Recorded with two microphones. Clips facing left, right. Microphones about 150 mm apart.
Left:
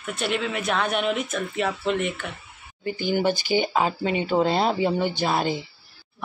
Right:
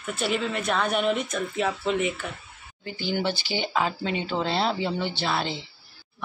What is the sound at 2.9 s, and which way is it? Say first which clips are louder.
Speech: left 5 dB; 50° left (ahead or behind).